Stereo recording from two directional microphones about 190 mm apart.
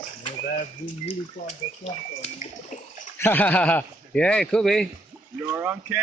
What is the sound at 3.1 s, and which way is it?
Speech, 10° left (ahead or behind).